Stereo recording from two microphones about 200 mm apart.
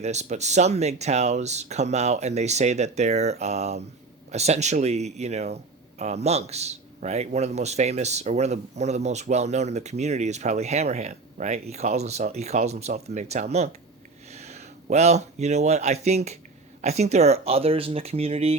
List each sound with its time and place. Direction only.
0.0 s a man's voice: 35° right (ahead or behind)